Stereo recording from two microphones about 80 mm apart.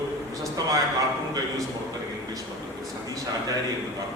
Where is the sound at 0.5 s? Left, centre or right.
Right.